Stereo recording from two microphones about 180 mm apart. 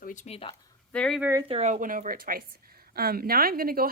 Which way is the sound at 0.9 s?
5° left (ahead or behind).